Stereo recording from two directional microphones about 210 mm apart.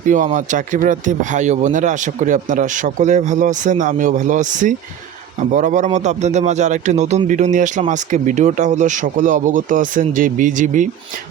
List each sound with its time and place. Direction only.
0.0 s speech: 40° right (ahead or behind)